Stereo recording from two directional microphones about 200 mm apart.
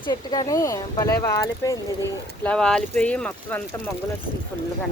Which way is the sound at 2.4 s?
5° left (ahead or behind).